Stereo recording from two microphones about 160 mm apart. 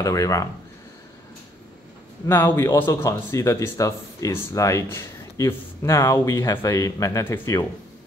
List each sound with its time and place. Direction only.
0.0 s speech: 20° left (ahead or behind)
2.2 s speech: 15° left (ahead or behind)